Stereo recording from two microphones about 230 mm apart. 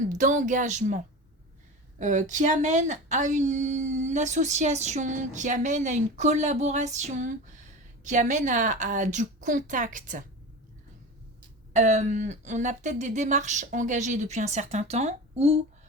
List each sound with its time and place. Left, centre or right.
0.1 s speech: right
11.7 s speech: right